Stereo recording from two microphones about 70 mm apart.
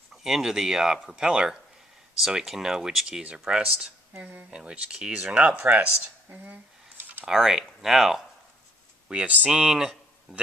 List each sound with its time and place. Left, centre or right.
0.2 s speech: centre; by 5.9 s right
6.4 s a sound: right
7.3 s speech: centre
9.0 s speech: centre
9.5 s speech: centre